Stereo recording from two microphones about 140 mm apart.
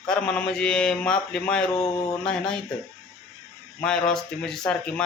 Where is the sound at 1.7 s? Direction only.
25° left (ahead or behind).